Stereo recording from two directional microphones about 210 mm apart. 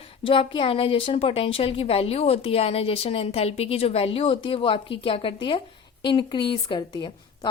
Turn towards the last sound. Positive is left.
turn(degrees=20)  # may be behind; listen again after turning